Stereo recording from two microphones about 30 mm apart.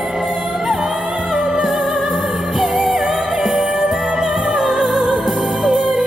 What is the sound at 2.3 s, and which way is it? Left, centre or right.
Music, centre.